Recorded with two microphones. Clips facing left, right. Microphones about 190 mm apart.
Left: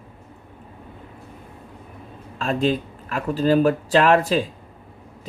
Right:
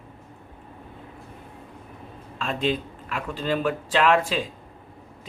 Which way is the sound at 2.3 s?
40° left (ahead or behind).